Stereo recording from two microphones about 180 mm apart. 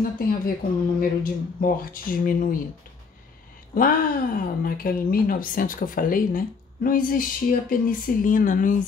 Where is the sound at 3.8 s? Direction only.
50° left (ahead or behind).